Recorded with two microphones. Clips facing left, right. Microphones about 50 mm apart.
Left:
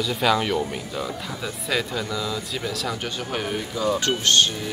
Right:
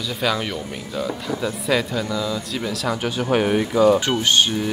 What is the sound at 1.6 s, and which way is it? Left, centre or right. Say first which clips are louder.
Speech: right 3 dB; centre.